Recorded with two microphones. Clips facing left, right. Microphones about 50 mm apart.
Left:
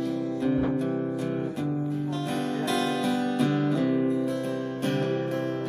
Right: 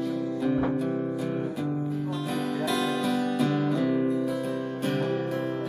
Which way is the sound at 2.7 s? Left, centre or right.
Centre.